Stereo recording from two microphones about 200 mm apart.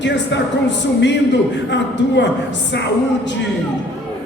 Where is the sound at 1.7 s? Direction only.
60° left (ahead or behind).